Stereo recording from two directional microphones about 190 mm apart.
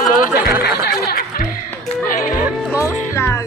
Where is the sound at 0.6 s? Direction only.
55° left (ahead or behind).